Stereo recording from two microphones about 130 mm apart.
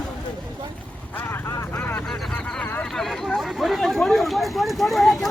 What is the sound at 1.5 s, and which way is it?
Vehicle, 20° left (ahead or behind).